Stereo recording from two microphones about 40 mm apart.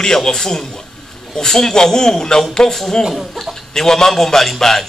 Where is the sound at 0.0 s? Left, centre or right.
Centre.